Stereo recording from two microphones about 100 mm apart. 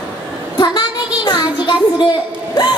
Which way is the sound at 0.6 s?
45° left (ahead or behind).